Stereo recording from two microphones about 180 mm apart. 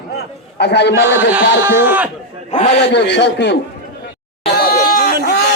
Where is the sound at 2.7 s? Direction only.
70° left (ahead or behind).